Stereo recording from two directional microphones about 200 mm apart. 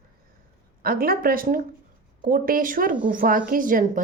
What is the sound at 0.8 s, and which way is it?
A woman's voice, 50° right (ahead or behind).